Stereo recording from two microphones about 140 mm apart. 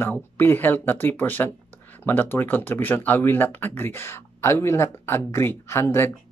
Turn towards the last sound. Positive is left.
turn(degrees=20)  # may be behind; listen again after turning